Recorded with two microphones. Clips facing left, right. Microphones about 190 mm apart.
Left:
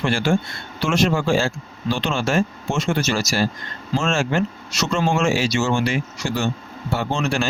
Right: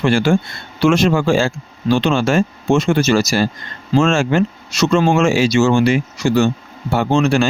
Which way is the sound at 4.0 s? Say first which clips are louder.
Right 6 dB; 90° right.